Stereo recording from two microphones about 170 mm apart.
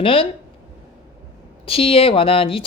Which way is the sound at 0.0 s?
30° left (ahead or behind).